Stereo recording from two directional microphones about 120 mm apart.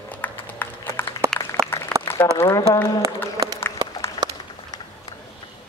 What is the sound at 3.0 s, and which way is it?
Speech, 30° right (ahead or behind).